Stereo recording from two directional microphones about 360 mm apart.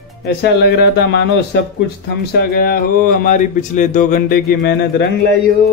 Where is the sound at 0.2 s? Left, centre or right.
Left.